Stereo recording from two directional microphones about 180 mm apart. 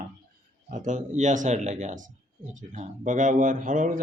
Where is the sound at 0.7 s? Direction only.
45° right (ahead or behind).